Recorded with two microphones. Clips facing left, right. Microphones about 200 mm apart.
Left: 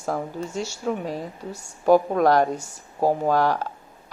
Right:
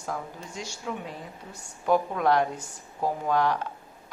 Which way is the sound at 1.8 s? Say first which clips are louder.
Left 6 dB; 40° left (ahead or behind).